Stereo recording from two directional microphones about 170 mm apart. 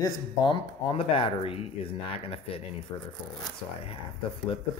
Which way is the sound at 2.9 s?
20° left (ahead or behind).